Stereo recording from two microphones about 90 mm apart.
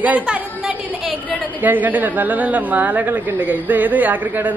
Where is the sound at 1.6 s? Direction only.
20° right (ahead or behind).